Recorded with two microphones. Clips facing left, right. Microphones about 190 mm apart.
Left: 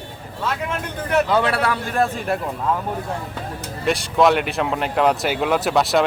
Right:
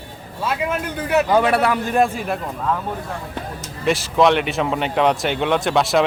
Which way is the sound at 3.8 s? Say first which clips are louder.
Right 1 dB; centre (ahead or behind).